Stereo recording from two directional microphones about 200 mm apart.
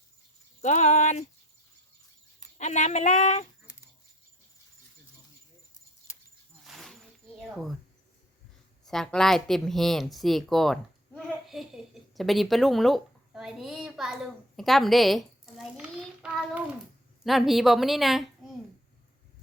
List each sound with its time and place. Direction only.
0.6 s speech: 35° left (ahead or behind)
2.6 s speech: 35° left (ahead or behind)
6.7 s a sound: centre (ahead or behind)
7.4 s a woman's voice: centre (ahead or behind)
8.8 s a woman's voice: centre (ahead or behind)